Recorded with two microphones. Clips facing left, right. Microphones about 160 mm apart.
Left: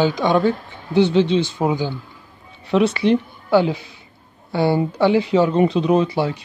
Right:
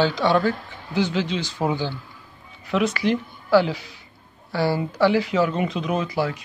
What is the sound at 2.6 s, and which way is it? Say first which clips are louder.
Speech: left 5 dB; 30° left (ahead or behind).